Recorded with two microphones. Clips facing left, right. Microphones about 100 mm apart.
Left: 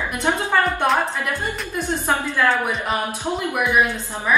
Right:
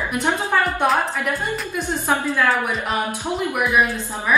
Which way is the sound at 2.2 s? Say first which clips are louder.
Even; centre (ahead or behind).